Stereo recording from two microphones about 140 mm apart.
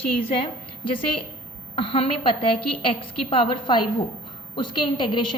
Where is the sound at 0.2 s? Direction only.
40° left (ahead or behind).